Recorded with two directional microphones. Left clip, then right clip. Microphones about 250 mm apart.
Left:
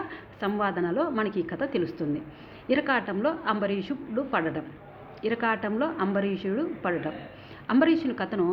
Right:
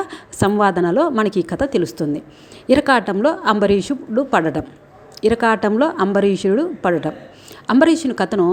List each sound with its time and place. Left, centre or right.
0.1 s a woman's voice: right